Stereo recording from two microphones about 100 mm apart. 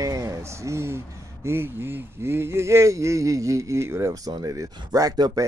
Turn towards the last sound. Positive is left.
turn(degrees=-40)  # may be behind; listen again after turning